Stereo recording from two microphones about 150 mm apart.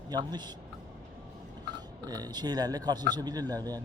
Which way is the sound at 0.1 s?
30° right (ahead or behind).